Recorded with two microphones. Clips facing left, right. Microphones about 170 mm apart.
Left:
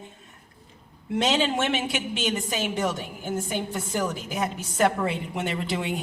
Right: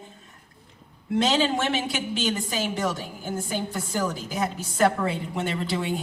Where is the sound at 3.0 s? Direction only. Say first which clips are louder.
Left 1 dB; 30° right (ahead or behind).